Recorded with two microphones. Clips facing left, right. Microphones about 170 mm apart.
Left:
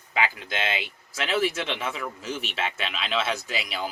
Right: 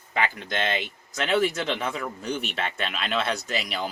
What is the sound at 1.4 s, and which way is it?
Speech, 45° right (ahead or behind).